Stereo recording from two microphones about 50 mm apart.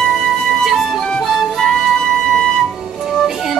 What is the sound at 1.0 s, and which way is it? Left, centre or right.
Music, centre.